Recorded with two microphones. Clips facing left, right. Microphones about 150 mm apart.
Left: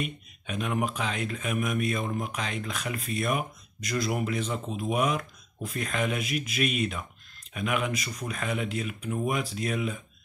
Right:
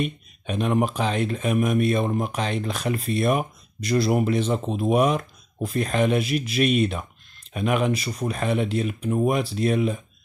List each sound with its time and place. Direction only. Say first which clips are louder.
0.0 s speech: right 7 dB; 35° right (ahead or behind)